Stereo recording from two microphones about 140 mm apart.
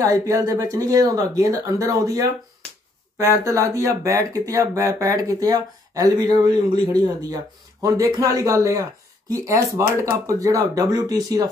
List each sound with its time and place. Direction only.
0.0 s speech: 25° right (ahead or behind)